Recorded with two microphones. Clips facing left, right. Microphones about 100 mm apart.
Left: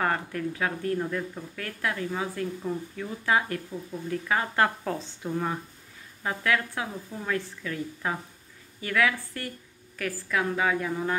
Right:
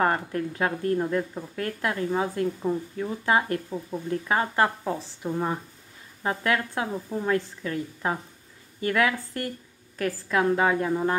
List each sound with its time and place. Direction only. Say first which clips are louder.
0.0 s a woman's voice: right 3 dB; 30° right (ahead or behind)
6.2 s a woman's voice: right 2 dB; 30° right (ahead or behind)